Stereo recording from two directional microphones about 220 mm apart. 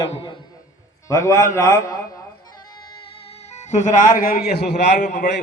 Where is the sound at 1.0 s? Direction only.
15° left (ahead or behind).